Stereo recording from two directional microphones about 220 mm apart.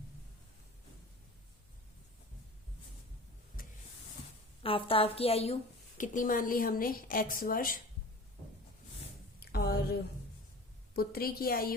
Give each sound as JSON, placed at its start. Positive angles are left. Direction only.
{"t": 4.6, "sound": "a woman's voice", "side_deg": 25}
{"t": 6.0, "sound": "a woman's voice", "side_deg": 40}
{"t": 9.4, "sound": "a sound", "side_deg": 45}
{"t": 10.9, "sound": "a woman's voice", "side_deg": 45}